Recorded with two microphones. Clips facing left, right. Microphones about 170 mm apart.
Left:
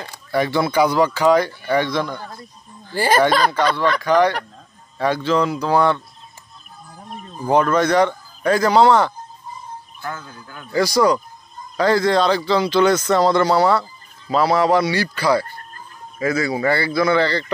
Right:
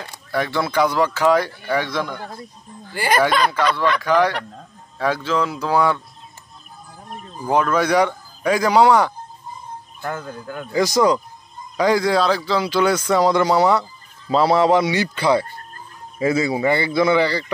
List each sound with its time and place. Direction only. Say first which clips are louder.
0.0 s speech: left 3 dB; centre (ahead or behind)
2.9 s speech: left 2 dB; 30° left (ahead or behind)
4.0 s speech: left 2 dB; 5° right (ahead or behind)
7.1 s speech: left 2 dB; centre (ahead or behind)
10.0 s speech: right 4 dB; 50° right (ahead or behind)
10.7 s a man's voice: even; 20° right (ahead or behind)